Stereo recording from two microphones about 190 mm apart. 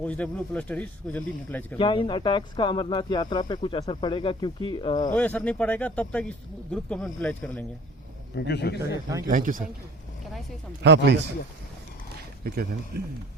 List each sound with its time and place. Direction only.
0.0 s speech: 5° left (ahead or behind)
1.8 s speech: 25° left (ahead or behind)
5.1 s speech: 10° left (ahead or behind)
8.4 s a man's voice: 60° left (ahead or behind)
9.2 s speech: 45° right (ahead or behind)
10.8 s speech: 65° right (ahead or behind)
12.4 s speech: 55° right (ahead or behind)